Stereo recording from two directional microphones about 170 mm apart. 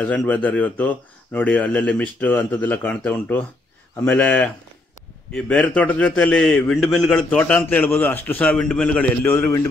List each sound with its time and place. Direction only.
0.0 s a man's voice: 10° left (ahead or behind)